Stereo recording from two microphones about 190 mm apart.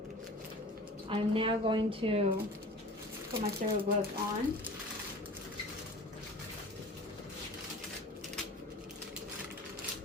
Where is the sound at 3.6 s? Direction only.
45° right (ahead or behind).